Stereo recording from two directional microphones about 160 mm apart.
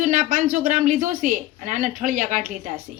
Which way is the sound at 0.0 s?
50° right (ahead or behind).